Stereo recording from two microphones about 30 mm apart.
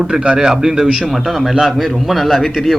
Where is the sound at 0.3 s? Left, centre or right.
Centre.